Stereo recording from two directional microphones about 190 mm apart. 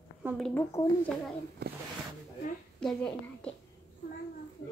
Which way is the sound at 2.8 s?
5° left (ahead or behind).